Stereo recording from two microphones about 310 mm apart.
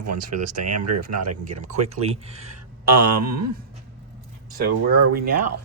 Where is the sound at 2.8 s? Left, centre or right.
Right.